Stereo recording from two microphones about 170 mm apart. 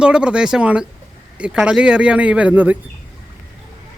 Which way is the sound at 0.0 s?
5° right (ahead or behind).